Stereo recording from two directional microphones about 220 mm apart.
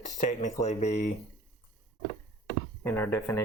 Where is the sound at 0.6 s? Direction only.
30° left (ahead or behind).